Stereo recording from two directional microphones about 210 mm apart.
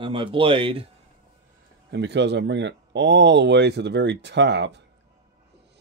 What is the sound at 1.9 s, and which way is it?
Speech, 55° right (ahead or behind).